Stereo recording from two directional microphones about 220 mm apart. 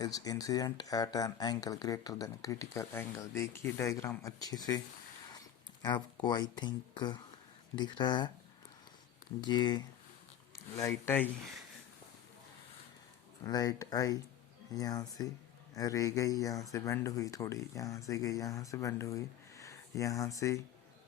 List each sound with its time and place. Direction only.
0.0 s speech: 15° left (ahead or behind)
5.3 s a sound: 20° left (ahead or behind)
6.2 s speech: 20° left (ahead or behind)
9.4 s speech: 20° left (ahead or behind)
13.4 s speech: 15° left (ahead or behind)